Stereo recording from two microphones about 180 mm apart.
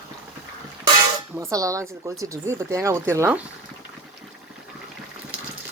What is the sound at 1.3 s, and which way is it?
Speech, 20° right (ahead or behind).